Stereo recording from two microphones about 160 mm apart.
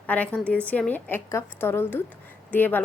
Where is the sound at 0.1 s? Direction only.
10° left (ahead or behind).